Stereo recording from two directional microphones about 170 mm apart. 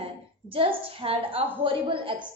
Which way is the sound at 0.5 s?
35° right (ahead or behind).